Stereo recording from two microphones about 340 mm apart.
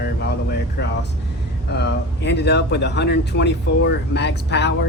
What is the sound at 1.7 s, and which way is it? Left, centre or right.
Speech, left.